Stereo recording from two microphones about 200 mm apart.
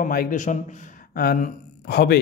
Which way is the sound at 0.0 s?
45° left (ahead or behind).